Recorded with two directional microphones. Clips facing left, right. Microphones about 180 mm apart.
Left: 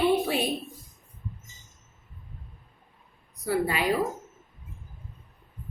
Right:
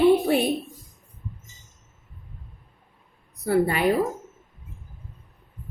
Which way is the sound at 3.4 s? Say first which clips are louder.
Right 5 dB; 55° right (ahead or behind).